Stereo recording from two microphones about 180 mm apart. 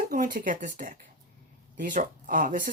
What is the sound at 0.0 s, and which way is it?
Speech, 50° right (ahead or behind).